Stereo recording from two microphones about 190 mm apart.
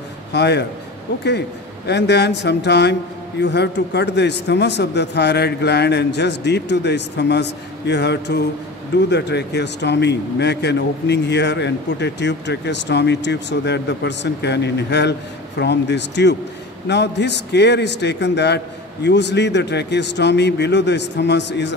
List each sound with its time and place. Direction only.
0.3 s speech: 60° left (ahead or behind)
1.9 s speech: 60° left (ahead or behind)